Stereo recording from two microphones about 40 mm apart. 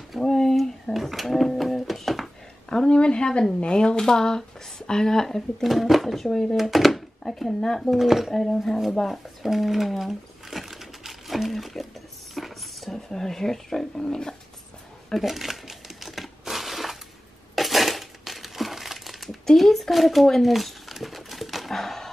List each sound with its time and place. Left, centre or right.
0.2 s a sound: centre
2.7 s a woman's voice: left
5.6 s speech: centre
6.5 s speech: centre
7.9 s speech: centre
8.3 s speech: centre
9.0 s a sound: centre
13.1 s speech: centre
15.1 s crumpling: centre
17.6 s crushing: centre
19.4 s speech: centre
20.4 s a sound: centre
21.7 s a sound: centre